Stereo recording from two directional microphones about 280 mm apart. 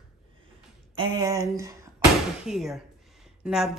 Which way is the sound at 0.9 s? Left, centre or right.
Centre.